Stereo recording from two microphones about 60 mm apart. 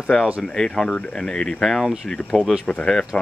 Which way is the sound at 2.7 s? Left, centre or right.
Centre.